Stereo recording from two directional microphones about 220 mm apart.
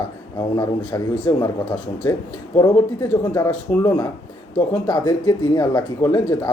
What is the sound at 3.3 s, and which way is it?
Speech, 15° left (ahead or behind).